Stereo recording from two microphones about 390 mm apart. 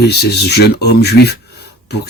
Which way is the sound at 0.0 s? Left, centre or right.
Left.